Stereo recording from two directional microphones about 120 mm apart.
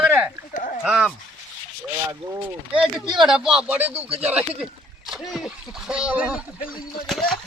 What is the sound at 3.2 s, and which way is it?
Speech, 5° right (ahead or behind).